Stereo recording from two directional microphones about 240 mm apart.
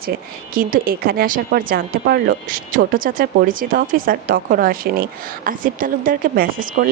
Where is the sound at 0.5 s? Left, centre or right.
Right.